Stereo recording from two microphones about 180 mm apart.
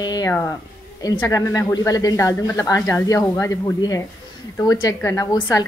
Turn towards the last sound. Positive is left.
turn(degrees=20)  # may be behind; listen again after turning